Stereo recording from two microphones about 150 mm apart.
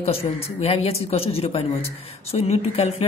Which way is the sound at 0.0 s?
40° left (ahead or behind).